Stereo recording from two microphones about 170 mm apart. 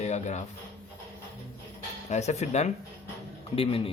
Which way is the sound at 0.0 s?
40° left (ahead or behind).